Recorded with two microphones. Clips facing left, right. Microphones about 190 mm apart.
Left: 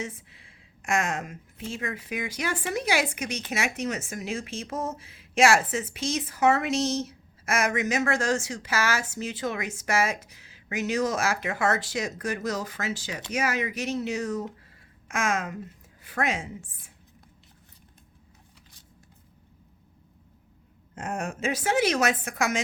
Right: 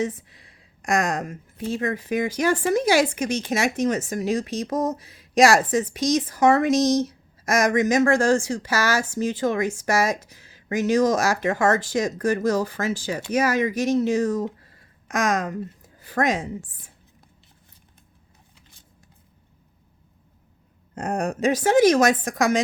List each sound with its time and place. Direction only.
0.3 s a woman's voice: 40° right (ahead or behind)
12.8 s speech: 50° right (ahead or behind)
13.3 s a woman's voice: 35° right (ahead or behind)
20.9 s a woman's voice: 35° right (ahead or behind)